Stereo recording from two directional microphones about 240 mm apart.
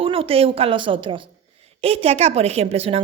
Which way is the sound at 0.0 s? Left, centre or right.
Right.